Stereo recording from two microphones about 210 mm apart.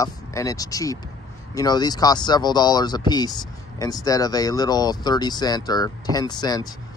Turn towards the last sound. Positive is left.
turn(degrees=20)  # may be behind; listen again after turning